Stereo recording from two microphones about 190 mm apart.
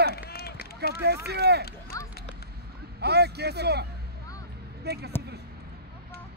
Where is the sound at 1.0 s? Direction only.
60° right (ahead or behind).